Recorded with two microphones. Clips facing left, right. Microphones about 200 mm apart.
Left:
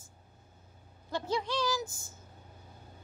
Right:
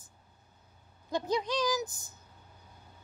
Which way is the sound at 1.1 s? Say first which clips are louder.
Right 2 dB; 15° right (ahead or behind).